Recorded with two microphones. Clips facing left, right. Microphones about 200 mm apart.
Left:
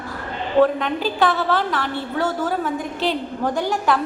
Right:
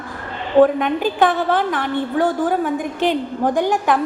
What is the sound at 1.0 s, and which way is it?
A woman's voice, 15° right (ahead or behind).